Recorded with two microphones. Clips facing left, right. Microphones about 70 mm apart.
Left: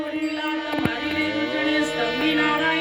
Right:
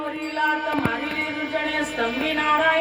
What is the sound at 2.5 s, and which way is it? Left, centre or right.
Music, centre.